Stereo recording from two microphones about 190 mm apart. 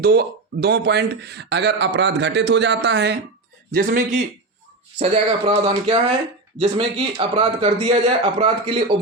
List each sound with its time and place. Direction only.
0.0 s speech: 55° right (ahead or behind)
3.7 s a man's voice: 50° right (ahead or behind)
4.9 s a man's voice: 30° right (ahead or behind)